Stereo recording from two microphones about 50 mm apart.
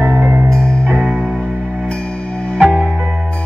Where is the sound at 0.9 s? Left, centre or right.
Right.